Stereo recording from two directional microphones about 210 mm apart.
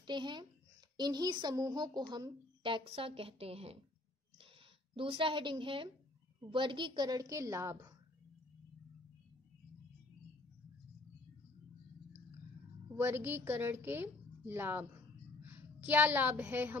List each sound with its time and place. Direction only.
0.0 s a woman's voice: 20° right (ahead or behind)
4.9 s a woman's voice: 25° right (ahead or behind)
12.9 s a woman's voice: 10° right (ahead or behind)